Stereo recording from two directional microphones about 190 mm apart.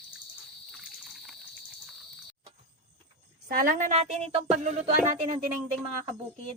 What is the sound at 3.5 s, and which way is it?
Speech, 45° right (ahead or behind).